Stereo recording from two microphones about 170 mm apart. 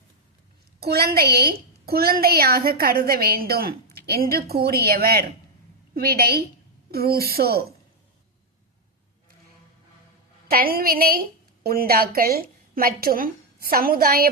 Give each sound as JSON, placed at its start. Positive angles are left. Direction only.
{"t": 0.8, "sound": "a woman's voice", "side_deg": -65}
{"t": 10.5, "sound": "a woman's voice", "side_deg": -60}